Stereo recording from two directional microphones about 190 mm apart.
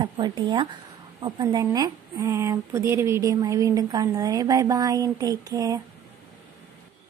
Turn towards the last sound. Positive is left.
turn(degrees=-20)  # may be behind; listen again after turning